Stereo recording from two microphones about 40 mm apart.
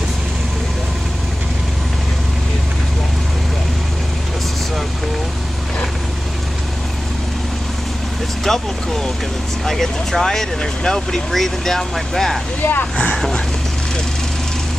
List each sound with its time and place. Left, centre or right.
8.5 s speech: centre
9.7 s speech: centre
12.6 s speech: left